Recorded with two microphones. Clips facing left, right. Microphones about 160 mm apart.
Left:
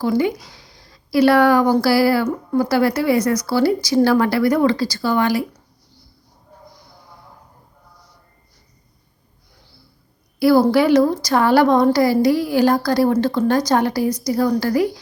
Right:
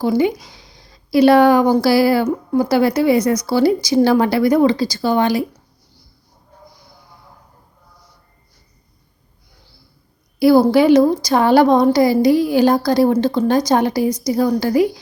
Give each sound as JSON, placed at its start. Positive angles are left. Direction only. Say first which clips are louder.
{"t": 0.0, "sound": "a woman's voice", "louder": "right 2 dB", "side_deg": -20}
{"t": 10.4, "sound": "a woman's voice", "louder": "right 3 dB", "side_deg": -20}